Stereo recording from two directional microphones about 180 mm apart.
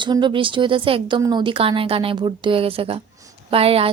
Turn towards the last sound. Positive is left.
turn(degrees=-30)  # may be behind; listen again after turning